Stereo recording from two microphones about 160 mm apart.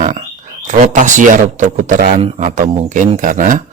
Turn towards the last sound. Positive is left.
turn(degrees=-55)  # may be behind; listen again after turning